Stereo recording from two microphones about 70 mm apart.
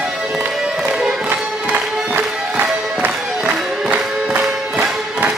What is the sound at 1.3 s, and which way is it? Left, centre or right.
Music, centre.